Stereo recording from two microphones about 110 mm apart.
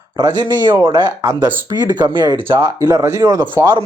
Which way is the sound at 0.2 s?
40° right (ahead or behind).